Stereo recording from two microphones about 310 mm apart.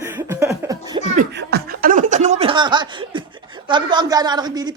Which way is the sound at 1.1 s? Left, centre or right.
Right.